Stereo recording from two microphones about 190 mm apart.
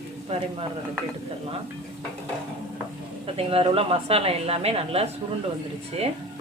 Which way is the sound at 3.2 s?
30° right (ahead or behind).